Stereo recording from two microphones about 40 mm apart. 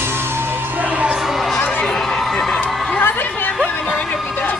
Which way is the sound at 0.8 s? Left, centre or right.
Right.